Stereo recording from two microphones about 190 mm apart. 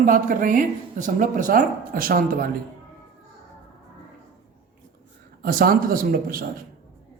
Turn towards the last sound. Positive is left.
turn(degrees=-50)  # may be behind; listen again after turning